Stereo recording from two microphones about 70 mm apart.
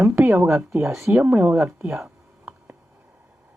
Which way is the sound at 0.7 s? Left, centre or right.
Right.